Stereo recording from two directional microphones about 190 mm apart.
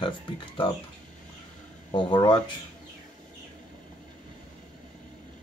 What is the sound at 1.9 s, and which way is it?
Speech, 25° left (ahead or behind).